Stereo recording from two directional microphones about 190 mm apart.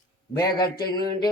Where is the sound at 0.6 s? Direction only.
55° left (ahead or behind).